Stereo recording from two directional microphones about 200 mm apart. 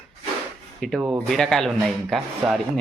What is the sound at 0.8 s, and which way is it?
Speech, centre (ahead or behind).